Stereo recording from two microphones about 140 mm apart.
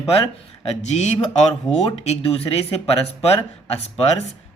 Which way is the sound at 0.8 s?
55° left (ahead or behind).